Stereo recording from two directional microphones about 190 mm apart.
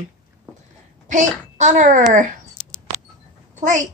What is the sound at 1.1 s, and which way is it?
A woman's voice, 40° right (ahead or behind).